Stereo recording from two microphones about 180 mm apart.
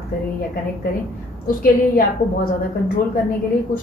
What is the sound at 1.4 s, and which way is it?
Speech, 55° left (ahead or behind).